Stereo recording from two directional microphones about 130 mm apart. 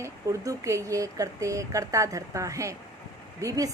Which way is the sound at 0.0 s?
25° right (ahead or behind).